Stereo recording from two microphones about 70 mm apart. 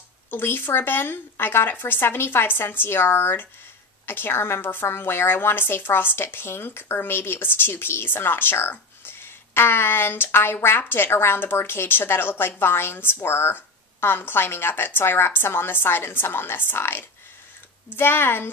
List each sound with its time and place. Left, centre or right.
0.3 s a woman's voice: left